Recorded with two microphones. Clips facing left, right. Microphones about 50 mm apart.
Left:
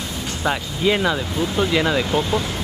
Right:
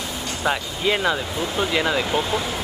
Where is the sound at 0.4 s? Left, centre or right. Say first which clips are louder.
Left 1 dB; centre.